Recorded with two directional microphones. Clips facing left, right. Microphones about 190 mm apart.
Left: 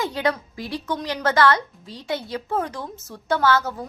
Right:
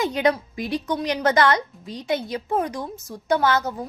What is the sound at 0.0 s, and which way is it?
A woman's voice, 20° right (ahead or behind).